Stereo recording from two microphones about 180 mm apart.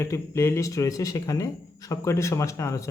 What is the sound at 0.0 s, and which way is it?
A man's voice, 15° left (ahead or behind).